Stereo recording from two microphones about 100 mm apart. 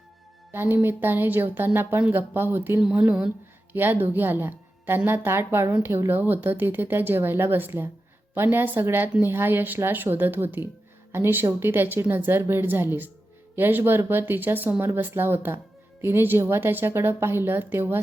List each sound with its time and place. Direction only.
0.5 s speech: 20° right (ahead or behind)